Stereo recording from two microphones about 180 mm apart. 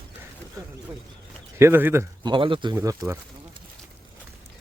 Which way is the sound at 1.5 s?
10° right (ahead or behind).